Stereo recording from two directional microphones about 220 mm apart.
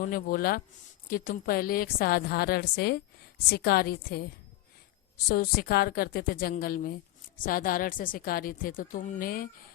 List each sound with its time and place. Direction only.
0.1 s a woman's voice: 40° left (ahead or behind)